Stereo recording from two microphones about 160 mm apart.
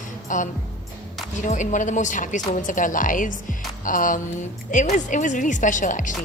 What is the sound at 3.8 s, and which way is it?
Music, 55° left (ahead or behind).